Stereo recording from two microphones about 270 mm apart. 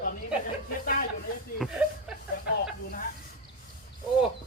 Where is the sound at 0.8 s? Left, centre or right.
Left.